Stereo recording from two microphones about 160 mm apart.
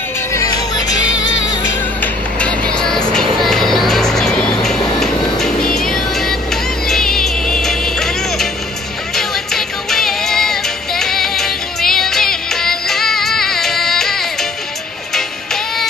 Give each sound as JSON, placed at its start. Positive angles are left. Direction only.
{"t": 0.3, "sound": "music", "side_deg": 20}
{"t": 2.7, "sound": "music", "side_deg": 5}